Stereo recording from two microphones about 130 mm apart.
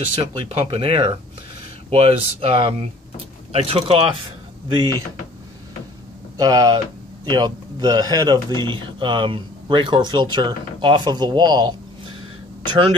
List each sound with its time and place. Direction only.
0.5 s speech: 45° right (ahead or behind)
6.3 s speech: 30° right (ahead or behind)